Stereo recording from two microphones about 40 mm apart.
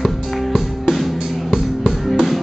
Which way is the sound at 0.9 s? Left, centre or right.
Centre.